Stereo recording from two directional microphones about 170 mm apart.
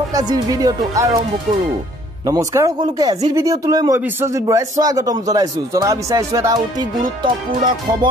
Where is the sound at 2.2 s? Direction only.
20° right (ahead or behind).